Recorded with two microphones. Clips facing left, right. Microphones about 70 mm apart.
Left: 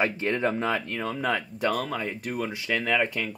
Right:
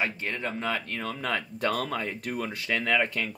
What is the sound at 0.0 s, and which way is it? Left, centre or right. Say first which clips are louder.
Speech: left 6 dB; left.